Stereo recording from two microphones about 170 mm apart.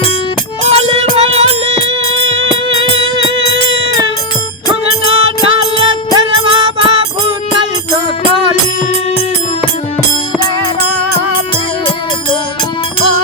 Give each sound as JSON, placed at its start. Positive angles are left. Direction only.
{"t": 0.6, "sound": "music", "side_deg": -40}
{"t": 2.6, "sound": "music", "side_deg": -30}
{"t": 5.1, "sound": "music", "side_deg": -35}